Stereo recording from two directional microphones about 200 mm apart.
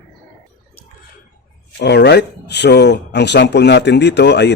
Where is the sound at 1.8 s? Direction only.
55° left (ahead or behind).